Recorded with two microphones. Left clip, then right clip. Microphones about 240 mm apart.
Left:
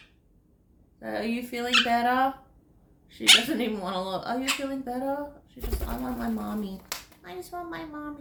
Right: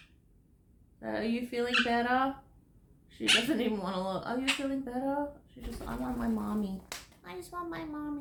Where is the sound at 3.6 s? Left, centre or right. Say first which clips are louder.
Left 3 dB; centre.